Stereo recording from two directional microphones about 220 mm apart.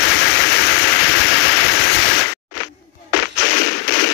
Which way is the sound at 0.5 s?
50° left (ahead or behind).